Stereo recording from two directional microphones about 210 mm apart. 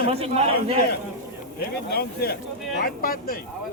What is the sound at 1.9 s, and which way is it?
Speech, 50° left (ahead or behind).